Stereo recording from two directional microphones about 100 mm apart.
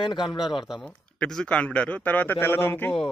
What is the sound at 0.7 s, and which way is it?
A man's voice, 5° left (ahead or behind).